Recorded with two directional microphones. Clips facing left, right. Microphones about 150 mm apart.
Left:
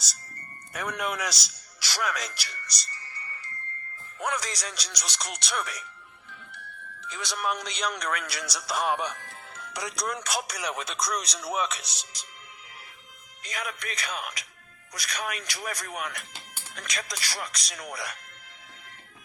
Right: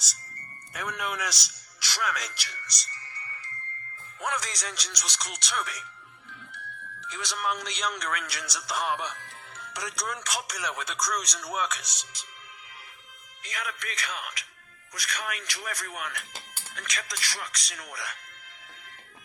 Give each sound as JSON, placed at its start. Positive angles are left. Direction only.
{"t": 0.7, "sound": "a man's voice", "side_deg": 35}
{"t": 4.2, "sound": "a man's voice", "side_deg": 35}
{"t": 7.1, "sound": "a man's voice", "side_deg": 35}
{"t": 13.4, "sound": "a man's voice", "side_deg": 35}